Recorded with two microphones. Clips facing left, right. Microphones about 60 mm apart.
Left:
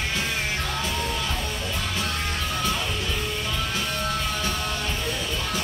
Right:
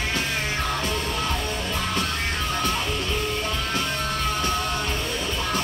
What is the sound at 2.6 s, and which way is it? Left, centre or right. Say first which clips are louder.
Music: right 1 dB; right.